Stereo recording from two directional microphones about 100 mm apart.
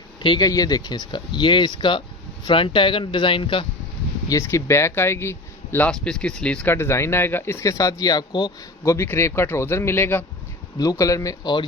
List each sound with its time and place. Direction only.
0.2 s speech: 55° left (ahead or behind)
0.4 s speech: 35° left (ahead or behind); by 3.7 s 60° left (ahead or behind)
4.3 s speech: 30° left (ahead or behind)
5.9 s speech: 5° left (ahead or behind)
6.7 s speech: 25° left (ahead or behind)
10.8 s speech: 35° left (ahead or behind)